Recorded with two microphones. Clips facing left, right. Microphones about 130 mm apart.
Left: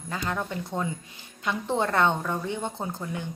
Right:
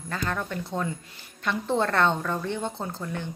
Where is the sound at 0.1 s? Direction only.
15° left (ahead or behind).